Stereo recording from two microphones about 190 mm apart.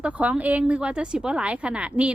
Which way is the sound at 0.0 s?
5° right (ahead or behind).